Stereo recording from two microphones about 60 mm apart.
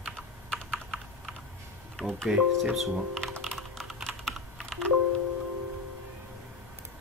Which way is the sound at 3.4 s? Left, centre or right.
Centre.